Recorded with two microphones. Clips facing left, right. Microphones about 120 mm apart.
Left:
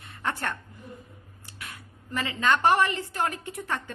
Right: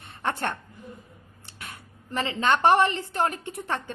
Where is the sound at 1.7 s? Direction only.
30° right (ahead or behind).